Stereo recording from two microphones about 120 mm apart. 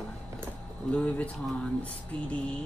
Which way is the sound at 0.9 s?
10° left (ahead or behind).